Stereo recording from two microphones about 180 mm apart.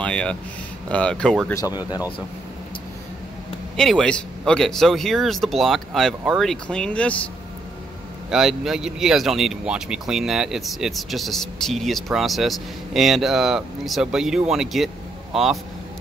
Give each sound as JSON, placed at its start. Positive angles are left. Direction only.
{"t": 0.0, "sound": "speech", "side_deg": 5}
{"t": 1.5, "sound": "speech", "side_deg": 20}
{"t": 3.7, "sound": "speech", "side_deg": 5}
{"t": 8.3, "sound": "speech", "side_deg": 0}